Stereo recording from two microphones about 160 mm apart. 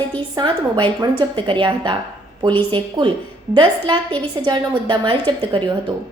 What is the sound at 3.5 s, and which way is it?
A woman's voice, 25° right (ahead or behind).